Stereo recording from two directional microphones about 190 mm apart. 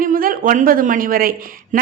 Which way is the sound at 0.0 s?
45° right (ahead or behind).